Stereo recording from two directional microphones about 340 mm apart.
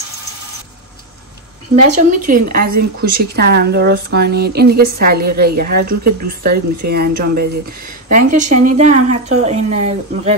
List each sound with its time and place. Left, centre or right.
2.0 s a woman's voice: right